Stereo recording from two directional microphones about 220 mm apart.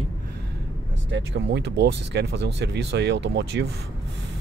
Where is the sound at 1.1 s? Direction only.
55° right (ahead or behind).